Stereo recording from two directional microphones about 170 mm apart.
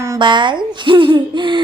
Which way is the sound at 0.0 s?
25° right (ahead or behind).